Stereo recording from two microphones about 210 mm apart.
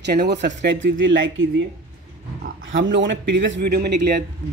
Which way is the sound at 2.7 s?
60° right (ahead or behind).